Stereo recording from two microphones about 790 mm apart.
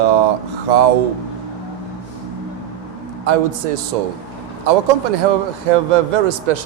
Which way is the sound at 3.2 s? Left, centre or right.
Right.